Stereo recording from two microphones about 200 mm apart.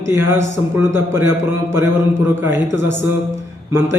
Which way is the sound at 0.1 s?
10° right (ahead or behind).